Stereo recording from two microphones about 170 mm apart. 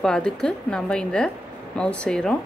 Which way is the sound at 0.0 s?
5° left (ahead or behind).